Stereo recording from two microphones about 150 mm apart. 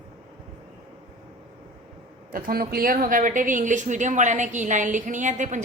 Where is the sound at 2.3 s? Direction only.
85° right.